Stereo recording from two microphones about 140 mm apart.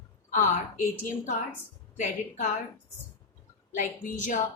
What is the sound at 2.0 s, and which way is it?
Speech, 60° left (ahead or behind).